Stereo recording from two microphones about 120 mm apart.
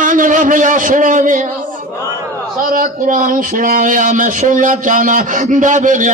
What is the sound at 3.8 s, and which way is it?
A man's voice, 90° right.